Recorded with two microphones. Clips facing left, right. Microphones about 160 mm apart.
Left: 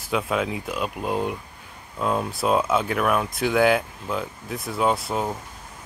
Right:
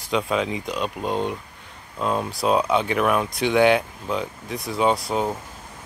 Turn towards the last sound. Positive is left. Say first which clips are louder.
# right 2 dB
turn(degrees=0)  # may be behind; listen again after turning